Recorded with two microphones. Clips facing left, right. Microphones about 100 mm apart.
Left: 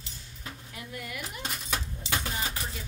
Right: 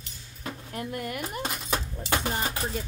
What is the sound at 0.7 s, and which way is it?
Speech, 50° right (ahead or behind).